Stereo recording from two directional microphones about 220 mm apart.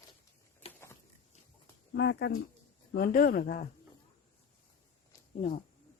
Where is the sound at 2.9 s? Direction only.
40° left (ahead or behind).